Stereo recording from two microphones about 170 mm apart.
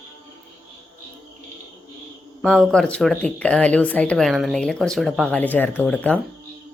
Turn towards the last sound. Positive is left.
turn(degrees=10)  # may be behind; listen again after turning